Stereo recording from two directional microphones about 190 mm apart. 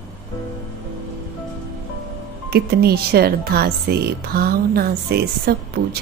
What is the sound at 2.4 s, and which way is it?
Speech, 55° right (ahead or behind).